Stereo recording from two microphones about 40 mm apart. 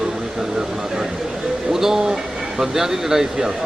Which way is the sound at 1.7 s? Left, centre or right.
Centre.